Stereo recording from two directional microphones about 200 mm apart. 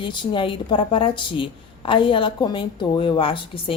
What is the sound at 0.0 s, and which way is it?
A woman's voice, 25° left (ahead or behind).